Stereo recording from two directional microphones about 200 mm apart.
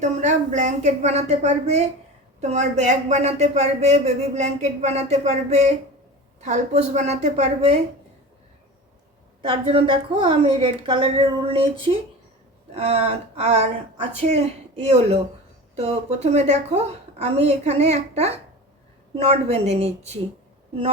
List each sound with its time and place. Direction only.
0.0 s speech: 35° right (ahead or behind)
9.4 s a woman's voice: 25° right (ahead or behind)